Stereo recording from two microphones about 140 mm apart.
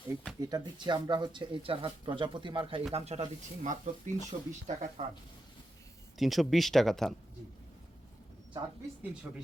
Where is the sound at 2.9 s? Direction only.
50° right (ahead or behind).